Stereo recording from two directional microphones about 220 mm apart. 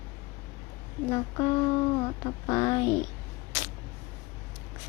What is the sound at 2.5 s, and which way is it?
Speech, 15° left (ahead or behind).